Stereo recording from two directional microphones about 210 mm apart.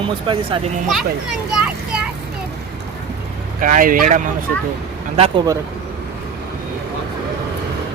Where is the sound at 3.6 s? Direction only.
40° right (ahead or behind).